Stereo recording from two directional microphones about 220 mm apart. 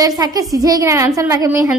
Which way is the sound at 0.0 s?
15° right (ahead or behind).